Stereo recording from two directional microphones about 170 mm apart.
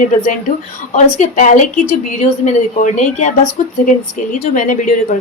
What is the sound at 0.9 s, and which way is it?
A woman's voice, 40° left (ahead or behind).